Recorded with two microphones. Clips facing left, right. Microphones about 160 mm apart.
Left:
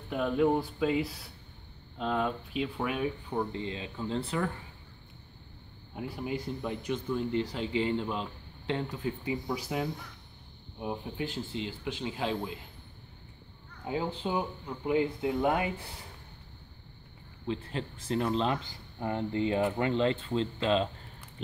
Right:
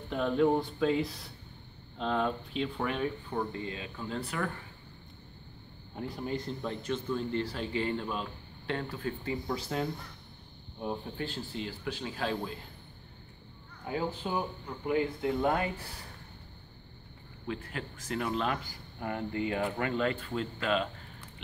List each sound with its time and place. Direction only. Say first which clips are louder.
0.1 s speech: even; 5° left (ahead or behind)
3.5 s speech: left 2 dB; 25° left (ahead or behind)
5.9 s speech: even; 10° left (ahead or behind)
13.8 s speech: left 1 dB; 20° left (ahead or behind)
17.5 s speech: left 3 dB; 30° left (ahead or behind)